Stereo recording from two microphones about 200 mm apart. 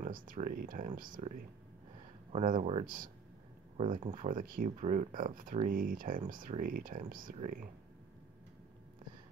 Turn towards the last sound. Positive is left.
turn(degrees=-40)  # may be behind; listen again after turning